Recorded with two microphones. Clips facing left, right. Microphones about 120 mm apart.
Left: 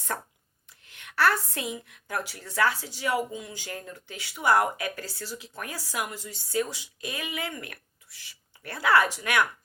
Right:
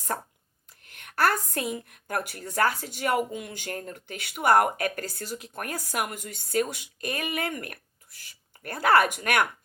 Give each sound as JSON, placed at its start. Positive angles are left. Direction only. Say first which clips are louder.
{"t": 0.1, "sound": "speech", "louder": "right 2 dB", "side_deg": -30}
{"t": 0.7, "sound": "a woman's voice", "louder": "left 1 dB", "side_deg": -45}